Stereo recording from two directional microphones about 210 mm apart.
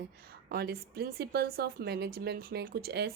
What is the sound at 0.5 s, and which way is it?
A woman's voice, 50° right (ahead or behind).